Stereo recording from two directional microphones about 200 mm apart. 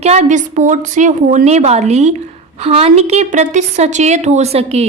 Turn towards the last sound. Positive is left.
turn(degrees=-30)  # may be behind; listen again after turning